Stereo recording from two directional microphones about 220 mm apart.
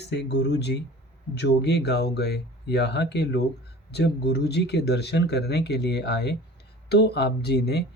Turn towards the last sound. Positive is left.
turn(degrees=50)  # may be behind; listen again after turning